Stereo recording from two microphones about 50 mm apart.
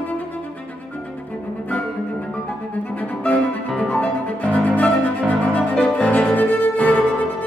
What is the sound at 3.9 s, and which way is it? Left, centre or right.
Music, left.